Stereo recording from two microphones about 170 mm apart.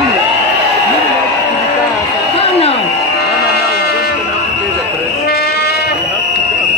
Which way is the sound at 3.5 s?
70° left (ahead or behind).